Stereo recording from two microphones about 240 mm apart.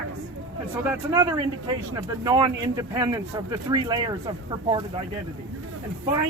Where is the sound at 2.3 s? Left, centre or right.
Centre.